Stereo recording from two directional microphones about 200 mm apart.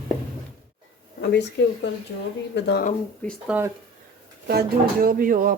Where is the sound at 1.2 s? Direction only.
60° left (ahead or behind).